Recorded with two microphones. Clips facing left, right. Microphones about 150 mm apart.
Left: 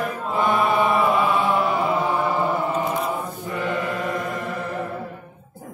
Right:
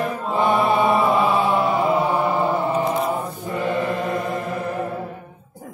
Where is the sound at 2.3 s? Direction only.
20° right (ahead or behind).